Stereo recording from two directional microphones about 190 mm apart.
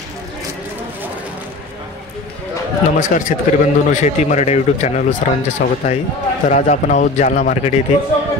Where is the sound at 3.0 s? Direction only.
45° left (ahead or behind).